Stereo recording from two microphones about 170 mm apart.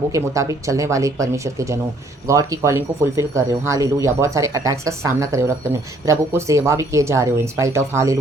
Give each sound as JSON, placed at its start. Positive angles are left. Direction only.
{"t": 0.1, "sound": "speech", "side_deg": -20}